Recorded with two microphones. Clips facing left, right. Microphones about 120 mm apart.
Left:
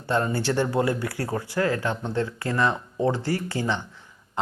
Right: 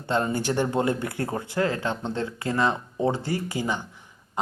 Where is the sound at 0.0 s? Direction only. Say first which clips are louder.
Left 1 dB; 20° right (ahead or behind).